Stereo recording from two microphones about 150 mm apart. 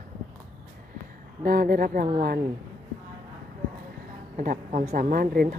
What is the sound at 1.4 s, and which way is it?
Speech, 70° right (ahead or behind).